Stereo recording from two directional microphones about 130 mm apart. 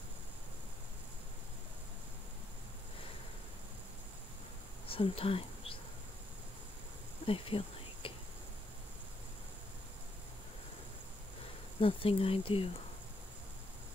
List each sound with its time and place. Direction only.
4.8 s speech: 45° left (ahead or behind)
7.2 s a sound: 45° left (ahead or behind)
11.8 s speech: 45° left (ahead or behind)